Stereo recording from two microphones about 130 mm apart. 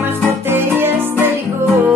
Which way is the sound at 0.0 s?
15° right (ahead or behind).